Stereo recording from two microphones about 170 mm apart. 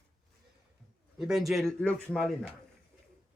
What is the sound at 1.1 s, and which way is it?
Speech, centre (ahead or behind).